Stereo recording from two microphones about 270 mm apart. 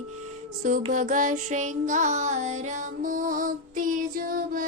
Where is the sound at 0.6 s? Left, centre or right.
Right.